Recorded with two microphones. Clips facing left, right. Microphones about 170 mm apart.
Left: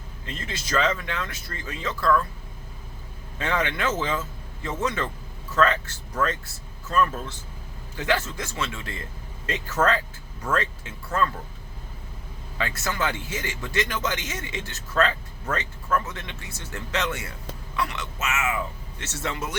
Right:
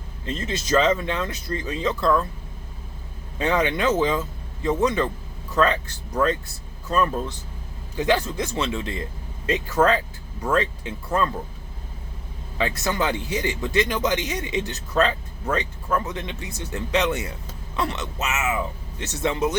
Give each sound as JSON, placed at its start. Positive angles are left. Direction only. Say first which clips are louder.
{"t": 0.3, "sound": "speech", "louder": "right 8 dB", "side_deg": -25}
{"t": 3.3, "sound": "speech", "louder": "right 5 dB", "side_deg": -20}
{"t": 12.5, "sound": "speech", "louder": "right 4 dB", "side_deg": -20}